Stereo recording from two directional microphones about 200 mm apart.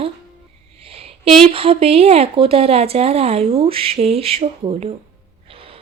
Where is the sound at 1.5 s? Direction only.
30° right (ahead or behind).